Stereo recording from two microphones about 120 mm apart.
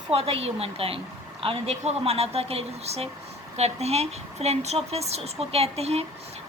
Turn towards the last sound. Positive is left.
turn(degrees=-60)  # may be behind; listen again after turning